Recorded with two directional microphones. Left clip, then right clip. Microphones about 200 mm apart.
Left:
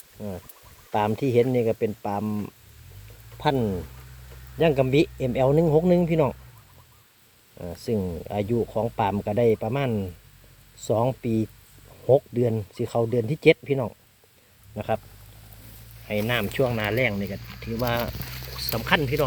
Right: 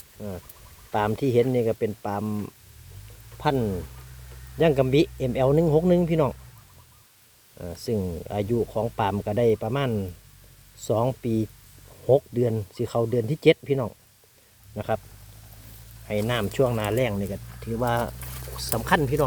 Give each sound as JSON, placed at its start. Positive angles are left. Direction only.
{"t": 0.2, "sound": "speech", "side_deg": 0}
{"t": 3.4, "sound": "speech", "side_deg": 5}
{"t": 7.6, "sound": "speech", "side_deg": 0}
{"t": 16.0, "sound": "speech", "side_deg": -10}